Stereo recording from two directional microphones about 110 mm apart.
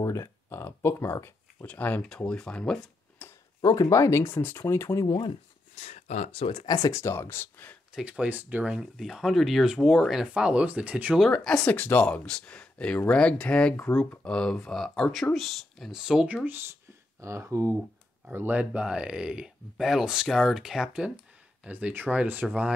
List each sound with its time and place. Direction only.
0.0 s a sound: 25° left (ahead or behind)
1.7 s speech: 15° left (ahead or behind)
3.6 s speech: 35° left (ahead or behind)
5.8 s speech: 80° left; by 6.6 s 60° left (ahead or behind)
6.6 s speech: 35° left (ahead or behind); by 7.7 s 20° left (ahead or behind)
7.9 s speech: 10° right (ahead or behind)
11.1 s speech: 5° left (ahead or behind); by 16.6 s 15° right (ahead or behind)
17.2 s speech: 25° right (ahead or behind)